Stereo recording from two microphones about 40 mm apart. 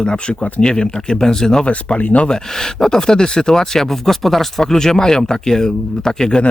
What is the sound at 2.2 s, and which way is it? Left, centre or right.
Speech, centre.